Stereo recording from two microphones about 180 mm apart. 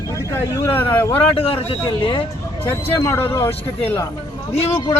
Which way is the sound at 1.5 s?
30° left (ahead or behind).